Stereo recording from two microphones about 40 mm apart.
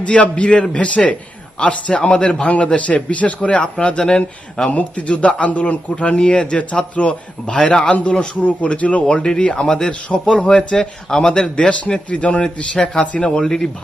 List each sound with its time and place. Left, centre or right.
0.0 s a man's voice: left
4.7 s a man's voice: left
8.4 s a man's voice: left
9.0 s a man's voice: left